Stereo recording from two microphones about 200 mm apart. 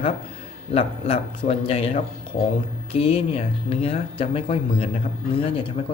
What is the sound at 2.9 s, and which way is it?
Speech, 30° left (ahead or behind).